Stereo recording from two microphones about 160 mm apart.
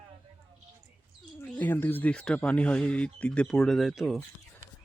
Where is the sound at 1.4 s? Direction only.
10° left (ahead or behind).